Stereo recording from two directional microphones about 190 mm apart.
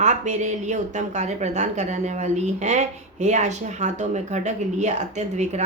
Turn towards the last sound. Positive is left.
turn(degrees=-35)  # may be behind; listen again after turning